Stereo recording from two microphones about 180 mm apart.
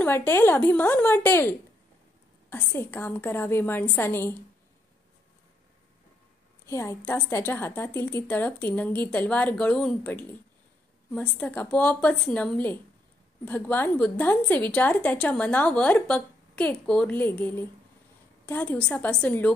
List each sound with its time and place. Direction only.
0.0 s a woman's voice: 10° left (ahead or behind)
2.5 s a woman's voice: 10° left (ahead or behind)
6.6 s a woman's voice: 15° left (ahead or behind)